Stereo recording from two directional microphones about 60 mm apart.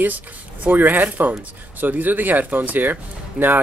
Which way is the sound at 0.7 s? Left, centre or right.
Right.